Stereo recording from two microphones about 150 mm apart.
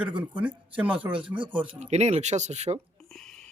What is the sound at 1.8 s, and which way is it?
Speech, 45° right (ahead or behind).